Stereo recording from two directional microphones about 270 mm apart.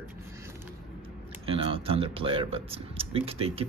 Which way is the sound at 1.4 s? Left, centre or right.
Right.